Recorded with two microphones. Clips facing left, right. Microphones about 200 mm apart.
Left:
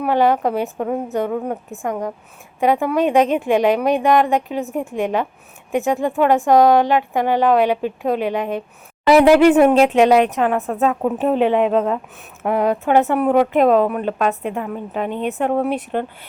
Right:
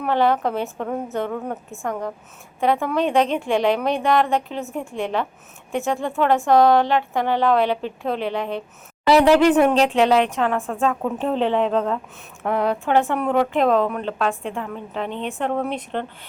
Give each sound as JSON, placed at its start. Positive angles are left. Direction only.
{"t": 0.0, "sound": "speech", "side_deg": 15}